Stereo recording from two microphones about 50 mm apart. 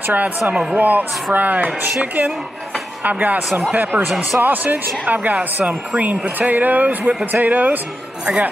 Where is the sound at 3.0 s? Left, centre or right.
Right.